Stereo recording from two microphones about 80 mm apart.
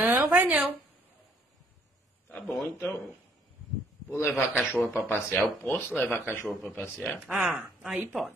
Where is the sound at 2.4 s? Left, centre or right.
Centre.